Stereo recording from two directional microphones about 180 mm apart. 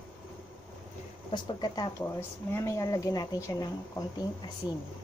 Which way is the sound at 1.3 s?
25° left (ahead or behind).